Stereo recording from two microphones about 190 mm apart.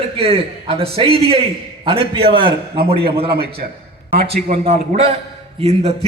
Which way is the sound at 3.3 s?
55° right (ahead or behind).